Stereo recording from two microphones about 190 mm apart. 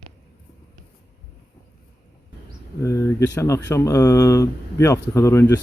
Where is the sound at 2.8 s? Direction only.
15° left (ahead or behind).